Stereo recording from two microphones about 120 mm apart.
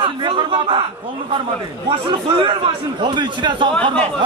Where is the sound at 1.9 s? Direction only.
40° right (ahead or behind).